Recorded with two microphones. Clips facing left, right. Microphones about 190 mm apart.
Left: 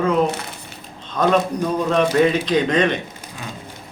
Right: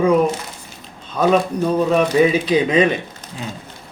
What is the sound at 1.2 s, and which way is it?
Speech, 5° right (ahead or behind).